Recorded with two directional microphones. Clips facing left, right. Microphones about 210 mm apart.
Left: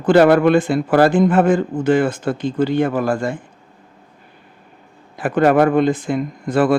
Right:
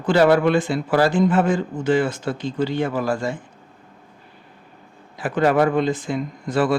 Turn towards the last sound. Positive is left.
turn(degrees=55)  # may be behind; listen again after turning